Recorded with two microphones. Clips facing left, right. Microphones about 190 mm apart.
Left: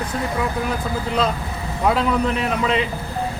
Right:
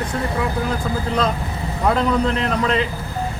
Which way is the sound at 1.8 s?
5° left (ahead or behind).